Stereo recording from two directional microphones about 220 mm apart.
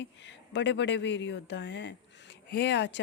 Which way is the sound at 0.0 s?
55° left (ahead or behind).